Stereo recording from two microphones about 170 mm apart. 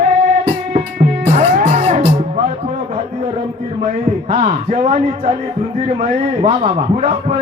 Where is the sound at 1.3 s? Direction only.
45° right (ahead or behind).